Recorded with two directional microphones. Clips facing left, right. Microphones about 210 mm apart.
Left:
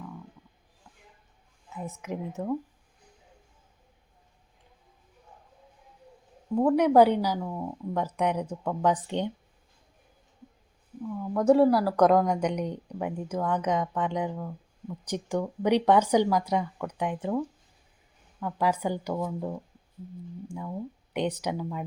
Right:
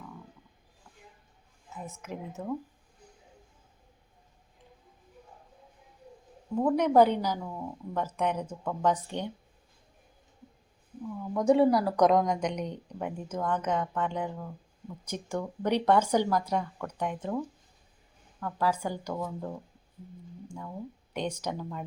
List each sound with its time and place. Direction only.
2.0 s speech: 15° left (ahead or behind)
6.6 s speech: 10° left (ahead or behind)
11.1 s a woman's voice: centre (ahead or behind)